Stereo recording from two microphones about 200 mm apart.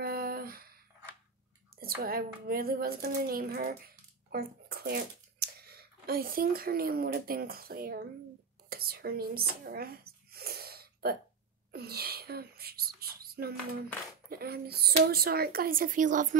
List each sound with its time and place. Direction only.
0.0 s a sound: 50° right (ahead or behind)
1.8 s speech: 50° right (ahead or behind)
8.6 s whispering: 50° right (ahead or behind)
11.7 s speech: 50° right (ahead or behind)